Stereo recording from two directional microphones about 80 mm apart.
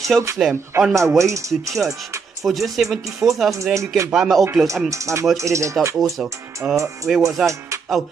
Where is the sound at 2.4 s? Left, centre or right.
Centre.